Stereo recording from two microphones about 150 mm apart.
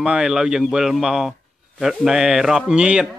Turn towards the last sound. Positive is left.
turn(degrees=-5)  # may be behind; listen again after turning